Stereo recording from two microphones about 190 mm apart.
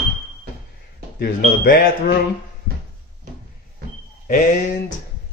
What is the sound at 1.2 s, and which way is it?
Speech, 50° left (ahead or behind).